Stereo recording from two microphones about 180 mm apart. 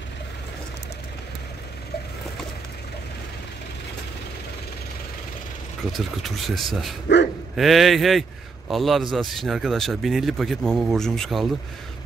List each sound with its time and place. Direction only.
5.9 s a man's voice: centre (ahead or behind)
7.1 s speech: 70° left (ahead or behind)
7.5 s a man's voice: centre (ahead or behind)